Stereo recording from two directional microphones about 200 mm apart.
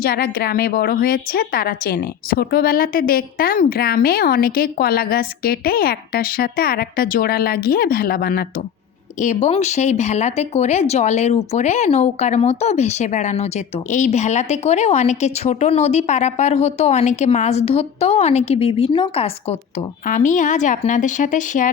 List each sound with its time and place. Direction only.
0.0 s a woman's voice: 50° left (ahead or behind)